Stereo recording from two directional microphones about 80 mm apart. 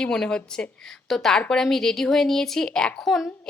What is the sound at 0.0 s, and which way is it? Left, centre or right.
A woman's voice, centre.